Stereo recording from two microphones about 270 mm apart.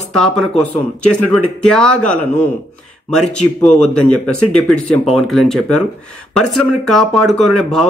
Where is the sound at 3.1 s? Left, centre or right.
Centre.